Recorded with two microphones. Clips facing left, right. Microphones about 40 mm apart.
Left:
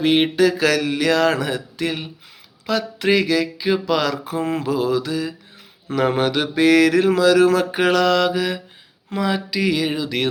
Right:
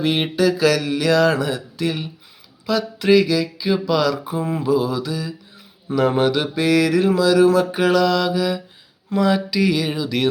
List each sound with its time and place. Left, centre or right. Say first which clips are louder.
0.0 s speech: left 2 dB; left
3.4 s mantra: even; left
4.3 s mantra: left 1 dB; left
4.6 s mantra: right 3 dB; left
9.1 s a sound: right 3 dB; centre
10.0 s speech: right 1 dB; left